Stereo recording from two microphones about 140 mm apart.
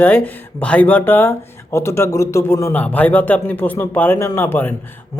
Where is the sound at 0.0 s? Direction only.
10° left (ahead or behind).